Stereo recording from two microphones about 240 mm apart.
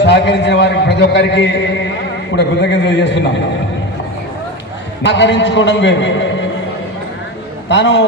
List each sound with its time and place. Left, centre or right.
0.0 s a man's voice: left
5.0 s a man's voice: left
7.7 s a man's voice: left